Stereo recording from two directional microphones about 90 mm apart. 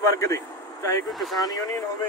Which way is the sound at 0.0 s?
35° left (ahead or behind).